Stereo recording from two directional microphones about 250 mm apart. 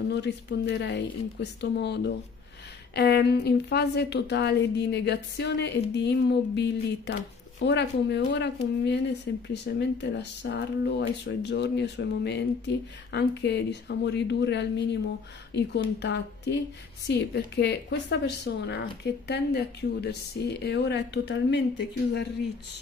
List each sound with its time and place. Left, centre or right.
0.1 s speech: left